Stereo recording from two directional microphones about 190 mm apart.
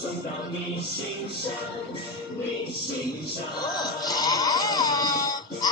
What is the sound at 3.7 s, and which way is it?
Music, 20° left (ahead or behind).